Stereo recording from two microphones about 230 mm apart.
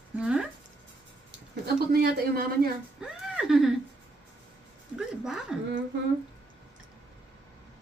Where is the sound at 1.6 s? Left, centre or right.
Right.